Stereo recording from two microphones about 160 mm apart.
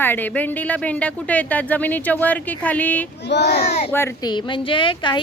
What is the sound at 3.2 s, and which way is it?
Speech, 90° left.